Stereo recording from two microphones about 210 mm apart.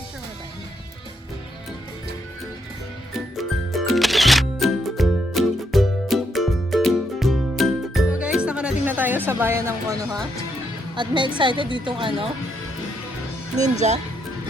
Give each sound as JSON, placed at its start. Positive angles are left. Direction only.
{"t": 3.3, "sound": "music", "side_deg": 0}
{"t": 10.9, "sound": "speech", "side_deg": -20}
{"t": 13.6, "sound": "speech", "side_deg": -35}